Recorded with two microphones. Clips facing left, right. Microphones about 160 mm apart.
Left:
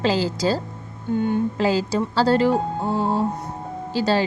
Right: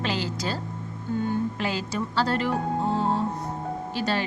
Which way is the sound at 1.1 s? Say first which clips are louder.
Left 5 dB; 20° left (ahead or behind).